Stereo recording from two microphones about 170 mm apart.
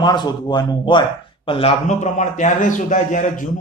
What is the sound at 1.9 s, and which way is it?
A man's voice, 45° left (ahead or behind).